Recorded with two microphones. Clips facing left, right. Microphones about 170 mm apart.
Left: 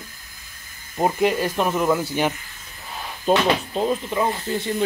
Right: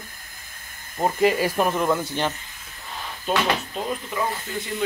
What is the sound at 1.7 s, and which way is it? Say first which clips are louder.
Speech: left 2 dB; 5° left (ahead or behind).